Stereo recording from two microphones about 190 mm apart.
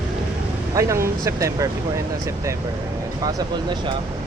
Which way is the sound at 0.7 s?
15° right (ahead or behind).